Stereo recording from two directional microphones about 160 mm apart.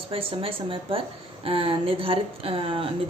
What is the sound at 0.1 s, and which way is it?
A woman's voice, 35° right (ahead or behind).